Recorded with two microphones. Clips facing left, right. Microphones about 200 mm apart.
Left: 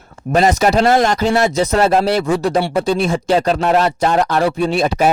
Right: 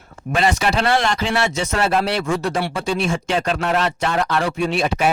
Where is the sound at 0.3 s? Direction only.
40° left (ahead or behind).